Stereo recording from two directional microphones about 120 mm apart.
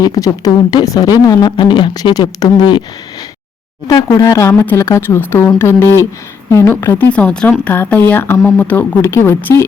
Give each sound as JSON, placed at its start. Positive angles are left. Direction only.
{"t": 0.0, "sound": "speech", "side_deg": 30}
{"t": 3.8, "sound": "speech", "side_deg": 30}
{"t": 7.0, "sound": "speech", "side_deg": 10}